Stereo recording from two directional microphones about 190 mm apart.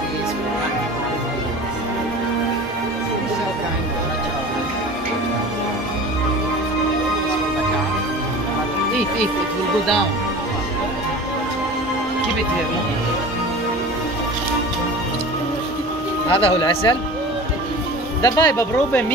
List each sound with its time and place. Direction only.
16.3 s speech: 30° left (ahead or behind)
18.2 s speech: 20° left (ahead or behind)